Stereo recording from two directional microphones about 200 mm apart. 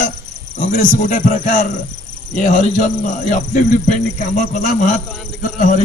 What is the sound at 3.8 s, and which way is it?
A man's voice, 40° left (ahead or behind).